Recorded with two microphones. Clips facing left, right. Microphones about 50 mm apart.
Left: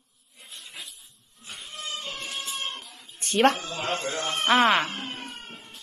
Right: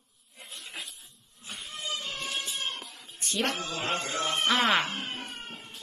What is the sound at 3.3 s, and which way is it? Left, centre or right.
A man's voice, left.